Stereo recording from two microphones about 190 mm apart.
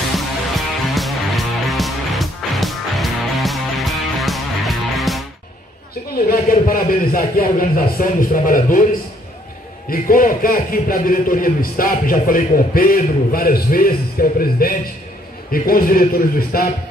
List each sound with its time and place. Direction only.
0.1 s music: centre (ahead or behind)
6.1 s a man's voice: 50° left (ahead or behind)
9.8 s a man's voice: 50° left (ahead or behind)